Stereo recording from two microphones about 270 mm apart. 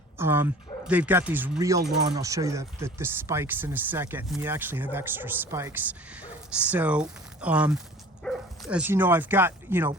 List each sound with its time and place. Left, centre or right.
0.2 s speech: centre
1.8 s speech: right
2.1 s speech: centre